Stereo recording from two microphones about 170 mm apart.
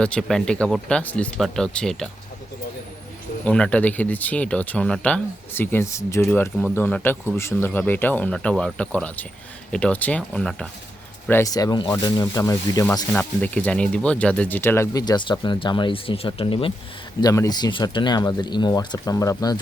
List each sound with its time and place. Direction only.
0.0 s speech: 5° left (ahead or behind)
3.4 s speech: 5° left (ahead or behind)
11.3 s speech: 15° left (ahead or behind)
13.1 s speech: 10° left (ahead or behind); by 16.7 s 30° left (ahead or behind)
17.2 s speech: 20° left (ahead or behind)